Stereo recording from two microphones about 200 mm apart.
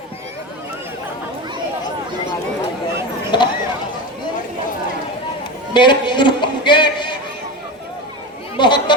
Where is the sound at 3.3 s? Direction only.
20° left (ahead or behind).